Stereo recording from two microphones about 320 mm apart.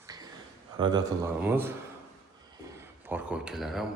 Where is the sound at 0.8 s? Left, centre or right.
Centre.